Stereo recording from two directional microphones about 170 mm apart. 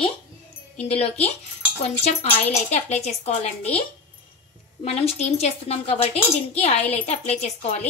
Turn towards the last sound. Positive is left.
turn(degrees=40)  # may be behind; listen again after turning